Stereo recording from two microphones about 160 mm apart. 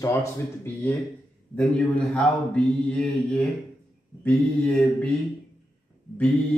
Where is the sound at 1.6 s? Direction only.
5° left (ahead or behind).